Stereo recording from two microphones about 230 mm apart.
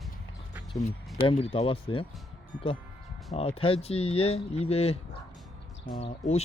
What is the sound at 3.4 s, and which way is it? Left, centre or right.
Speech, left.